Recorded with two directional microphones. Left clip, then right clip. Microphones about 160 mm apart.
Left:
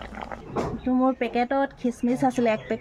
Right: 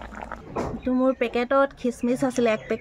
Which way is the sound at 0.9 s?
10° right (ahead or behind).